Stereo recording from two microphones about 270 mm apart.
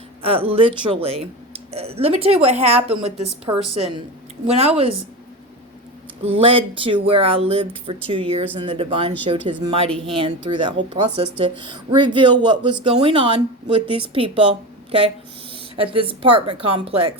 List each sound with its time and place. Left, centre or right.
0.2 s speech: right
6.2 s speech: centre
15.7 s speech: centre